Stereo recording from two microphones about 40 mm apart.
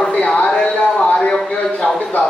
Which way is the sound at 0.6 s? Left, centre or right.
Left.